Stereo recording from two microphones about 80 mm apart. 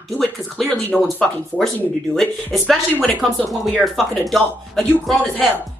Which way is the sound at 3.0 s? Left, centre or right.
Centre.